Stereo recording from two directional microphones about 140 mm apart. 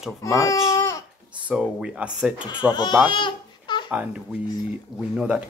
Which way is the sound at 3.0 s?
35° left (ahead or behind).